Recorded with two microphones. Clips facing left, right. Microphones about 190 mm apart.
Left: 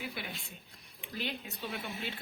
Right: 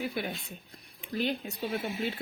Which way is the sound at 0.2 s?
45° right (ahead or behind).